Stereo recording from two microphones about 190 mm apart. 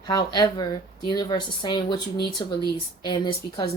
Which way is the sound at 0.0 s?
20° left (ahead or behind).